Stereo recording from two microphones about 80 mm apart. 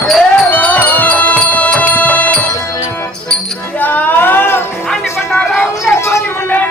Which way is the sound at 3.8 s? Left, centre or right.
Left.